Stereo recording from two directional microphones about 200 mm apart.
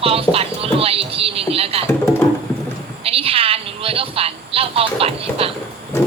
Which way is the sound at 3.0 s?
30° right (ahead or behind).